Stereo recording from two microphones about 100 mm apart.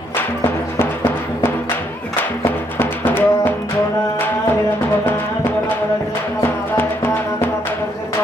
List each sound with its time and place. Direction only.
0.4 s music: 20° left (ahead or behind)
5.0 s music: 20° left (ahead or behind)
6.8 s music: 25° left (ahead or behind)